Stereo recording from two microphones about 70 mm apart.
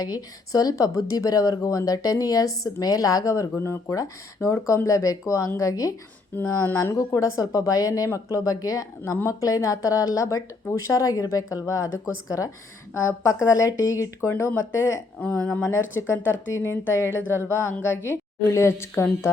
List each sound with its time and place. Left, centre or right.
0.0 s speech: left
6.3 s speech: left
6.9 s speech: left
15.2 s a woman's voice: left